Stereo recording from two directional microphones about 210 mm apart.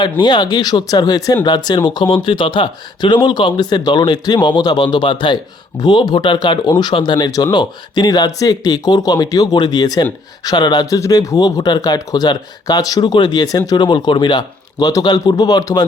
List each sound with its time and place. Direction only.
0.0 s speech: 20° left (ahead or behind)